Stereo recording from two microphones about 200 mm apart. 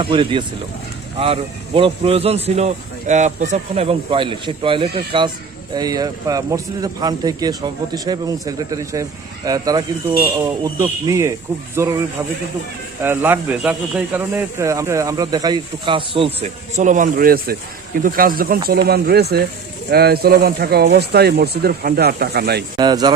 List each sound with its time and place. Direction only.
0.0 s speech: 25° right (ahead or behind); by 22.6 s 55° right (ahead or behind)
22.8 s speech: 20° right (ahead or behind)